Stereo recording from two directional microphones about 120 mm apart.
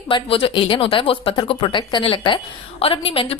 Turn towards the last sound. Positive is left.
turn(degrees=50)  # may be behind; listen again after turning